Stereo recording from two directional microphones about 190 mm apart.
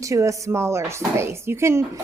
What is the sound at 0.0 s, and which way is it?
A woman's voice, 15° right (ahead or behind).